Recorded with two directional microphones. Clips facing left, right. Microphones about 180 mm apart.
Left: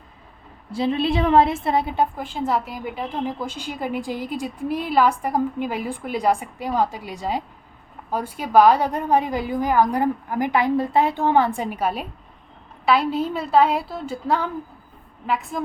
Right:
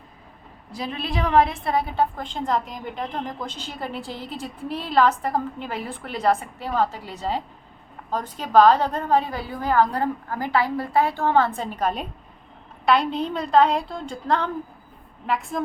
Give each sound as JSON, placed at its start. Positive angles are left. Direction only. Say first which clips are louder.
{"t": 0.7, "sound": "a woman's voice", "louder": "left 8 dB", "side_deg": 25}